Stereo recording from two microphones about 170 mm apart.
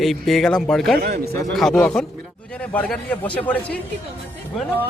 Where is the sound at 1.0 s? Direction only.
60° right (ahead or behind).